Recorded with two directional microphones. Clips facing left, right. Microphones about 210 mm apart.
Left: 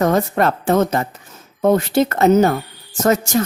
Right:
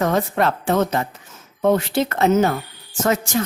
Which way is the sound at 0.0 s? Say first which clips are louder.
Left 3 dB; 45° left (ahead or behind).